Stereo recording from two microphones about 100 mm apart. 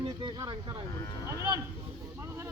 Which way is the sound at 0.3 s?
40° right (ahead or behind).